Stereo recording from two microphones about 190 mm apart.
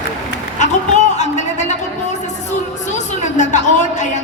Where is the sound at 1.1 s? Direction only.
40° left (ahead or behind).